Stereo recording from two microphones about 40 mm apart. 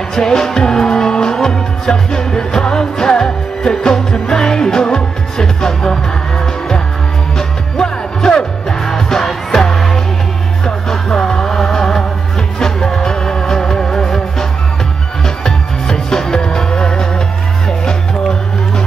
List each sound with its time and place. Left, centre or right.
0.1 s music: centre
7.3 s music: centre